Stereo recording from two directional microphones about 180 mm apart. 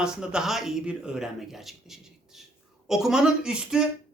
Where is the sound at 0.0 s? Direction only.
5° right (ahead or behind).